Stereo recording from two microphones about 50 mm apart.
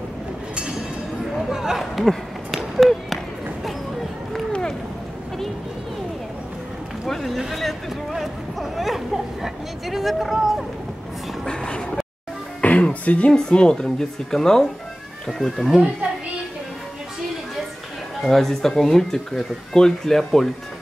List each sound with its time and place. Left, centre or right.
1.5 s a sound: centre
4.5 s run: centre
7.1 s speech: centre
7.3 s a child's voice: centre
11.4 s a sound: centre
12.6 s music: left
13.3 s speech: centre
15.7 s a child's voice: centre
18.2 s speech: centre